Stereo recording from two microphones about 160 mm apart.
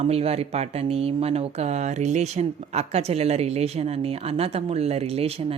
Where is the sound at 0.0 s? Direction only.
40° right (ahead or behind).